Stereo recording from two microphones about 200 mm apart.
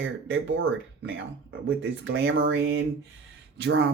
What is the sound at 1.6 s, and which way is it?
Speech, 70° right (ahead or behind).